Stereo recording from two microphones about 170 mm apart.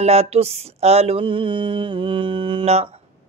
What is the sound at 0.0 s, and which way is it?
Mantra, 40° right (ahead or behind).